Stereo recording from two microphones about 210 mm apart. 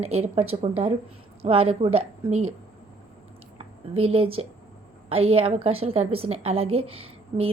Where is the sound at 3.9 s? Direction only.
25° right (ahead or behind).